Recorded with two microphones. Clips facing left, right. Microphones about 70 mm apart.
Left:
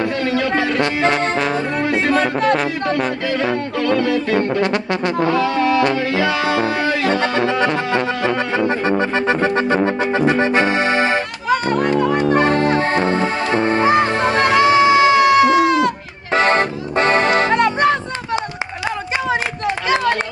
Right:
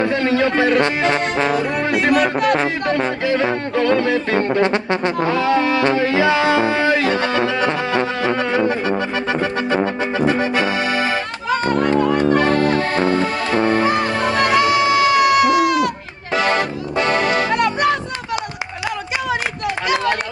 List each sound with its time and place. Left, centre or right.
0.0 s a man's voice: right
1.5 s speech: left
2.5 s yodeling: right
8.5 s music: left
16.3 s music: left